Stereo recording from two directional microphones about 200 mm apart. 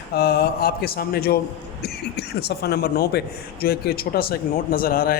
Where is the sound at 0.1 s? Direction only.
50° left (ahead or behind).